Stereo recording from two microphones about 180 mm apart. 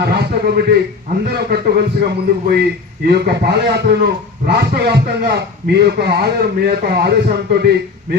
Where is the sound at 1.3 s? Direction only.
60° right (ahead or behind).